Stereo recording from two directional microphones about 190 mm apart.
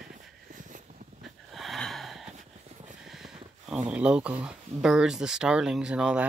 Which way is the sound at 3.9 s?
5° right (ahead or behind).